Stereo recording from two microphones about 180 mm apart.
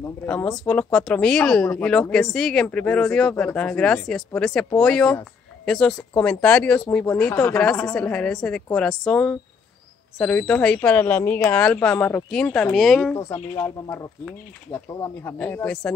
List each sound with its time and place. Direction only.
0.2 s a woman's voice: 10° left (ahead or behind)
13.1 s a woman's voice: 15° left (ahead or behind)